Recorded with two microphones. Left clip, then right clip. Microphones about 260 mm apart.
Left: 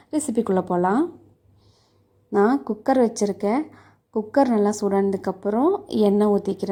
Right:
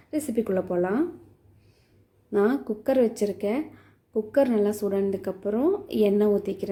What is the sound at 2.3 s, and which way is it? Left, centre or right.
A woman's voice, centre.